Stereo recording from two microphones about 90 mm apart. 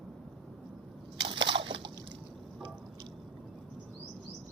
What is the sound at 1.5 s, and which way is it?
Slosh, 65° right (ahead or behind).